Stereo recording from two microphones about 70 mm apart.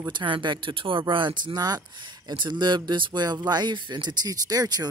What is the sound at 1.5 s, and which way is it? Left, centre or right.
Speech, right.